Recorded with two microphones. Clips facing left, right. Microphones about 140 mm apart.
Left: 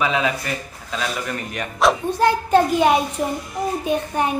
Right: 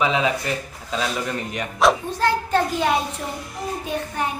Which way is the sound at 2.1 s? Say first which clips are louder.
Left 4 dB; 15° left (ahead or behind).